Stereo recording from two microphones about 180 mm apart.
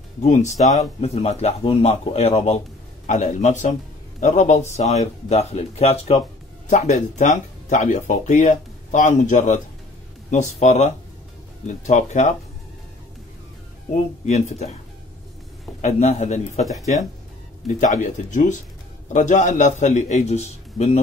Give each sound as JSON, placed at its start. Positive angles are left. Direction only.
{"t": 0.2, "sound": "speech", "side_deg": 40}
{"t": 14.2, "sound": "speech", "side_deg": 40}
{"t": 15.8, "sound": "speech", "side_deg": 40}
{"t": 17.7, "sound": "speech", "side_deg": 45}